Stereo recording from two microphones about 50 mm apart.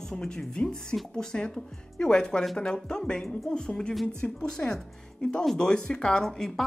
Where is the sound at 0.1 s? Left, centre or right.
Centre.